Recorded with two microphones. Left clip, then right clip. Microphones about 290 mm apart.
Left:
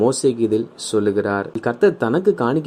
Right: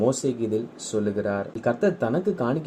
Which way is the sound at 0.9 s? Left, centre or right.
Left.